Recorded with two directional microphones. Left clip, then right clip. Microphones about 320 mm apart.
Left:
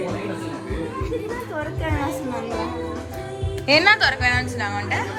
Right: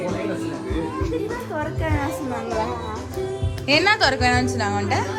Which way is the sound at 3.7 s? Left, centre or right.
Centre.